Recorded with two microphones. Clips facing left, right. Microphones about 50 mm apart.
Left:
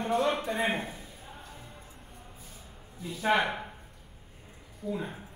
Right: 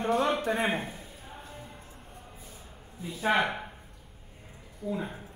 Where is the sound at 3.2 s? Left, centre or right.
Centre.